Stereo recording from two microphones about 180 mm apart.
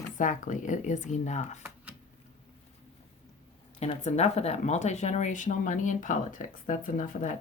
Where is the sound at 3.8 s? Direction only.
40° left (ahead or behind).